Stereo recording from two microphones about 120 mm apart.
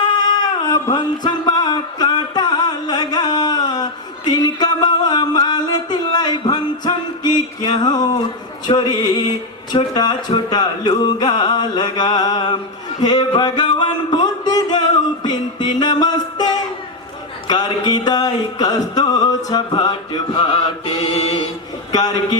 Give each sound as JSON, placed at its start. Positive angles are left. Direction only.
{"t": 0.6, "sound": "a sound", "side_deg": 35}
{"t": 8.6, "sound": "music", "side_deg": 35}
{"t": 21.9, "sound": "music", "side_deg": 35}